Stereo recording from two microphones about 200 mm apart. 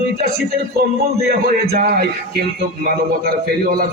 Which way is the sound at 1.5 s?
50° right (ahead or behind).